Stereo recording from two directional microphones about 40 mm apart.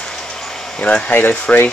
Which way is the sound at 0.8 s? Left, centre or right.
Left.